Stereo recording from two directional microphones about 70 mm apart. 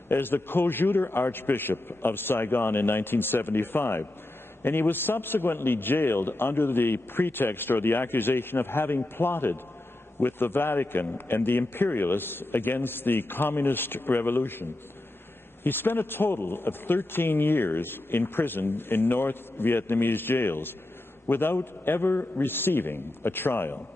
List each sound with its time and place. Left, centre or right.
0.1 s a man's voice: left